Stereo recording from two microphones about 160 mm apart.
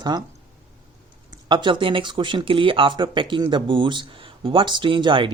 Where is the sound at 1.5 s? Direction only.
30° right (ahead or behind).